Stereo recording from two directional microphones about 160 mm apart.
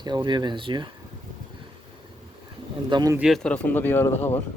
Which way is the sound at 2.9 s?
25° right (ahead or behind).